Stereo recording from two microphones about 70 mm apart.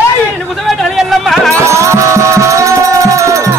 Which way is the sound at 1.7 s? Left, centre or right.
Right.